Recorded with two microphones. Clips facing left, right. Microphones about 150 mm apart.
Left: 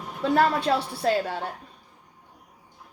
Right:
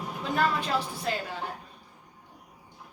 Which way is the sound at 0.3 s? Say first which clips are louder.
Left 5 dB; 70° left (ahead or behind).